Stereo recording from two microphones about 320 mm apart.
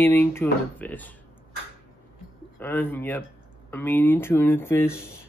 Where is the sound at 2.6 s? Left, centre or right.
Centre.